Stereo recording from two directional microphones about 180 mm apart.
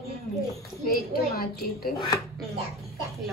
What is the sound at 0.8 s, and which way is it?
A woman's voice, 55° left (ahead or behind).